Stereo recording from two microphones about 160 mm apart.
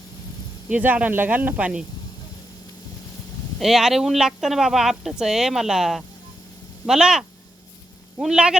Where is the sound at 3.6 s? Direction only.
Centre (ahead or behind).